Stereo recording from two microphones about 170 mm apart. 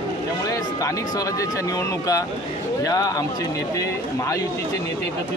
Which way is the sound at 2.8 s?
20° left (ahead or behind).